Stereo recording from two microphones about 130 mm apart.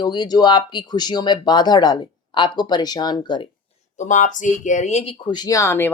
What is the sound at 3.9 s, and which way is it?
Speech, 70° left (ahead or behind).